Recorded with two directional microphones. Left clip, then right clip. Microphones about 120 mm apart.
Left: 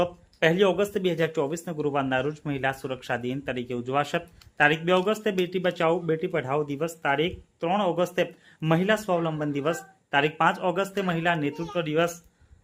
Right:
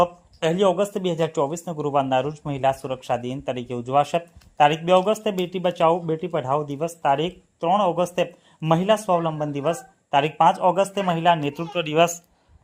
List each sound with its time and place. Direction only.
0.3 s a man's voice: 40° right (ahead or behind)